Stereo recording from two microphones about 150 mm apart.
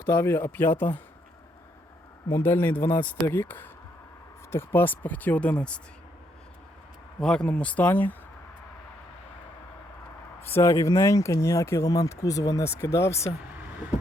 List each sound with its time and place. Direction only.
0.0 s speech: 15° left (ahead or behind)
2.3 s speech: 15° left (ahead or behind)
7.2 s speech: 5° left (ahead or behind)
10.4 s speech: 15° left (ahead or behind)